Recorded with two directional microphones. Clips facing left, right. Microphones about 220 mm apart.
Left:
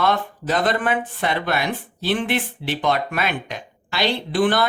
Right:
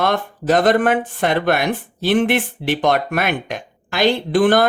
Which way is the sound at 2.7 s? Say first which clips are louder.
Right 5 dB; 50° right (ahead or behind).